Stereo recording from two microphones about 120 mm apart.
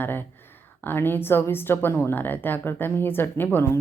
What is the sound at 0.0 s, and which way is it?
Speech, 15° left (ahead or behind).